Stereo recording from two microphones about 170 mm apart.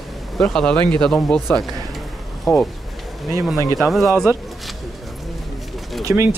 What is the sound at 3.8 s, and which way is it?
Speech, centre (ahead or behind).